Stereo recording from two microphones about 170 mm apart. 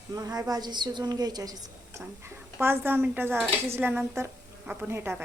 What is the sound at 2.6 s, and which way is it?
Speech, 15° right (ahead or behind).